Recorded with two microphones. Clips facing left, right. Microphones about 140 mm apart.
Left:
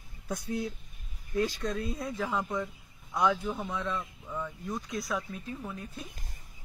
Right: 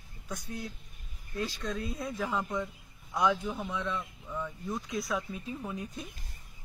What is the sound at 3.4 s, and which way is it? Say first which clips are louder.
Speech: left 1 dB; 5° left (ahead or behind).